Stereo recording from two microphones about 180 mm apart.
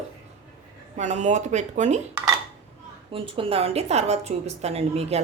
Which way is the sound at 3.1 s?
30° right (ahead or behind).